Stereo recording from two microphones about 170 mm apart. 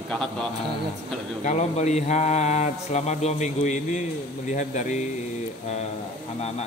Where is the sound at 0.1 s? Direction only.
5° left (ahead or behind).